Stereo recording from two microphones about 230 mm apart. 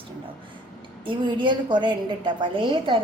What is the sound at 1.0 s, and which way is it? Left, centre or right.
A woman's voice, right.